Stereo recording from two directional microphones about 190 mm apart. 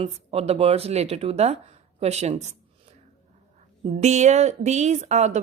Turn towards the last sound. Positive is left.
turn(degrees=-35)  # may be behind; listen again after turning